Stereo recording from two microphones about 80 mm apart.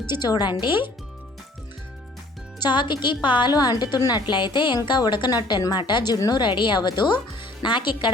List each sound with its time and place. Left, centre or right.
0.1 s a woman's voice: left
2.6 s a woman's voice: left
3.5 s a woman's voice: left
6.3 s a woman's voice: left
7.6 s a woman's voice: left